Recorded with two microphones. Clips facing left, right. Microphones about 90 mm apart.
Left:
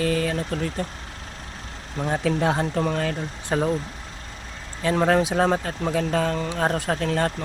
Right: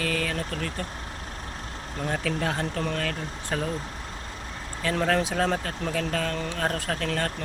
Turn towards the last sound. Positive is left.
turn(degrees=20)  # may be behind; listen again after turning